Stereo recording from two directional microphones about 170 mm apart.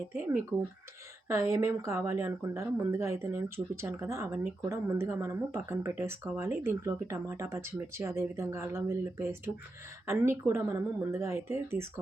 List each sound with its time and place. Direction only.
1.3 s speech: 15° right (ahead or behind)